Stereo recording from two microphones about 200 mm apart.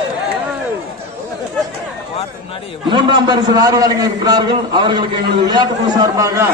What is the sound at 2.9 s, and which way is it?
A man's voice, 25° right (ahead or behind).